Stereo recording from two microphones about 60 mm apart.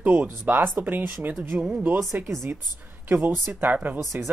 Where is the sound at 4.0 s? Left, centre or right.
Right.